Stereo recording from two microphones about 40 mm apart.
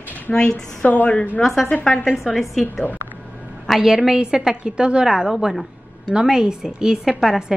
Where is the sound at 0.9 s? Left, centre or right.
Left.